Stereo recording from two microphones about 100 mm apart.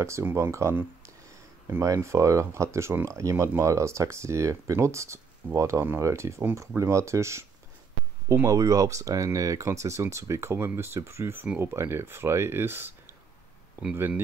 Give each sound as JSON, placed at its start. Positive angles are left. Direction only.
{"t": 0.0, "sound": "speech", "side_deg": -25}